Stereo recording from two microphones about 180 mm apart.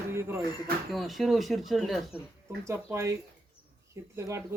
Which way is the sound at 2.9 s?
15° right (ahead or behind).